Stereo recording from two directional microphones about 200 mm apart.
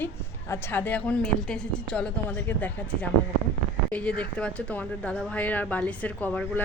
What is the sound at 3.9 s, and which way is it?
Speech, 5° left (ahead or behind).